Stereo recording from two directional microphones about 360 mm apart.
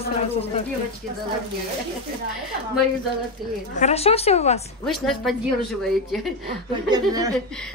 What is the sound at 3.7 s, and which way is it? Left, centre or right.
Speech, centre.